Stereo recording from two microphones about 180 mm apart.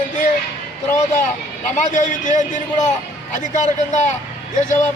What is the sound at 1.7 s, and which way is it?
A man's voice, 45° left (ahead or behind).